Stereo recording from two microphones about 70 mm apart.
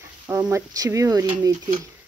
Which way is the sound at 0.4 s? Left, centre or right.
Right.